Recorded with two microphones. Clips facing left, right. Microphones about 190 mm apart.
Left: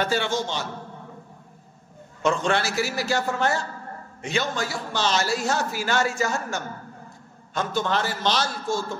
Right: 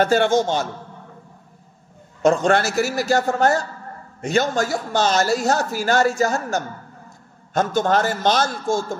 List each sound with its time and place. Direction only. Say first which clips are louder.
0.0 s a man's voice: right 8 dB; 50° right (ahead or behind)
2.2 s a man's voice: right 6 dB; 45° right (ahead or behind)